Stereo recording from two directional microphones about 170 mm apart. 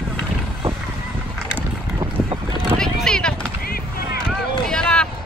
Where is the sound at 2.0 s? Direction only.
30° right (ahead or behind).